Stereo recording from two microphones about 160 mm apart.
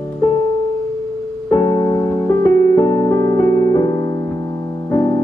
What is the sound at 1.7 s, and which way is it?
Music, 20° left (ahead or behind).